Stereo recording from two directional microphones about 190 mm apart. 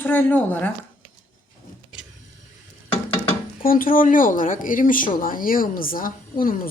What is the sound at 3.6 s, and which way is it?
Speech, 50° left (ahead or behind).